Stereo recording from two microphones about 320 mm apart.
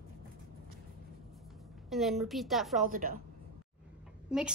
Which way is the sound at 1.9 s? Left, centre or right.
Centre.